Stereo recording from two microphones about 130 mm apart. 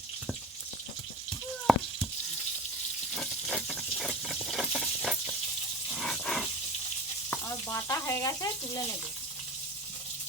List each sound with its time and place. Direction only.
1.7 s frying: centre (ahead or behind)
3.2 s a sound: 5° left (ahead or behind)
7.4 s speech: 25° left (ahead or behind)